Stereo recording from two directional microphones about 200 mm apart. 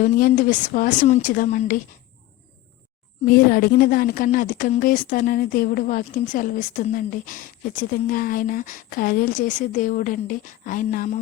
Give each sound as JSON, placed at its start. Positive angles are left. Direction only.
{"t": 0.0, "sound": "speech", "side_deg": 40}
{"t": 3.2, "sound": "speech", "side_deg": 50}